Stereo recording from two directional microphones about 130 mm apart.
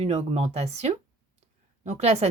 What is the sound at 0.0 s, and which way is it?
Speech, 50° right (ahead or behind).